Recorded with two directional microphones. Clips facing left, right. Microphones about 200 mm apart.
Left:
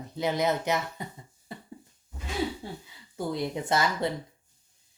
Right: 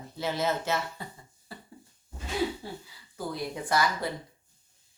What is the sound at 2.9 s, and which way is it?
Speech, 25° left (ahead or behind).